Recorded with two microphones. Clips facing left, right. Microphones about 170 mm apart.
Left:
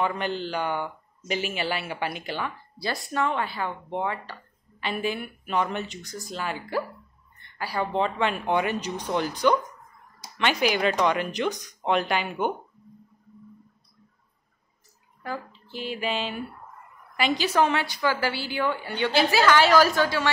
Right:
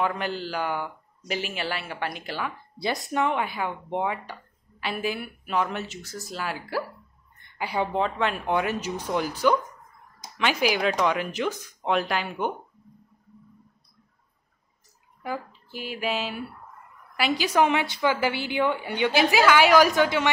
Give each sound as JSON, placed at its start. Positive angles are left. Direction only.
{"t": 0.0, "sound": "speech", "side_deg": -5}
{"t": 3.1, "sound": "speech", "side_deg": -15}
{"t": 7.5, "sound": "a woman's voice", "side_deg": -20}
{"t": 7.9, "sound": "speech", "side_deg": 0}
{"t": 15.2, "sound": "a woman's voice", "side_deg": -10}